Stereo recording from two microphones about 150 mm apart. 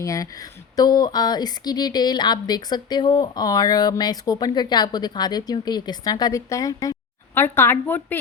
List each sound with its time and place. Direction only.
0.0 s speech: 20° left (ahead or behind)